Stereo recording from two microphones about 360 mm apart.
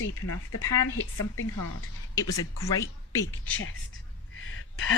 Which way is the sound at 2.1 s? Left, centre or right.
Centre.